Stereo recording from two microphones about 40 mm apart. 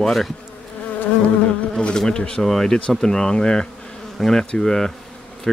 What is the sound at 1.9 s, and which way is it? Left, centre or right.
Speech, centre.